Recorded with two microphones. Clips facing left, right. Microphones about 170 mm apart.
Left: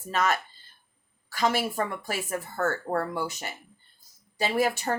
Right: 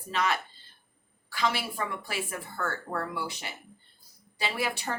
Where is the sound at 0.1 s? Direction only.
45° left (ahead or behind).